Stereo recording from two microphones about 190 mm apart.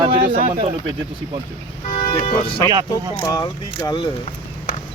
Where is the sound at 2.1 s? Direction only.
30° left (ahead or behind).